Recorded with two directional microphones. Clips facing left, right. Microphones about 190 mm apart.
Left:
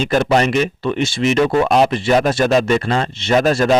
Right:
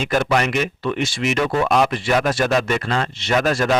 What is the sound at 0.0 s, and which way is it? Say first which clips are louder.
Speech: left 4 dB; 35° left (ahead or behind).